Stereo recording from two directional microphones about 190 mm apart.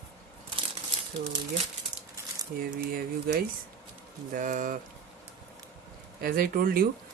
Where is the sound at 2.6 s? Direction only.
50° right (ahead or behind).